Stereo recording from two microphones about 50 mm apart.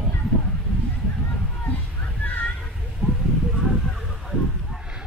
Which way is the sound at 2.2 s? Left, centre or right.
Left.